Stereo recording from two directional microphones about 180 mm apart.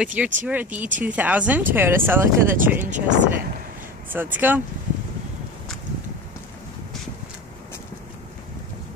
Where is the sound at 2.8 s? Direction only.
45° right (ahead or behind).